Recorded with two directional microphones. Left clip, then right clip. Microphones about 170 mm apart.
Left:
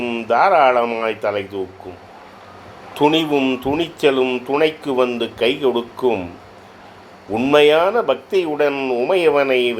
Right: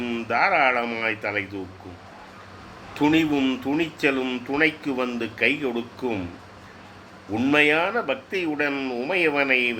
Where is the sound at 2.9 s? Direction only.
15° left (ahead or behind).